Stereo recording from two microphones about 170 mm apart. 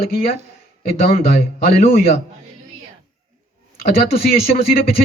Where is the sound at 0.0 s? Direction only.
60° left (ahead or behind).